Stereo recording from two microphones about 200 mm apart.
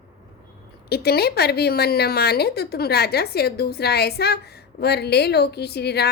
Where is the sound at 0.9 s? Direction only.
50° left (ahead or behind).